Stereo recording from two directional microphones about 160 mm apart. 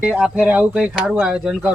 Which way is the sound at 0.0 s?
5° right (ahead or behind).